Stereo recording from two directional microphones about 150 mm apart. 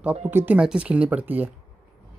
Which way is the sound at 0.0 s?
10° right (ahead or behind).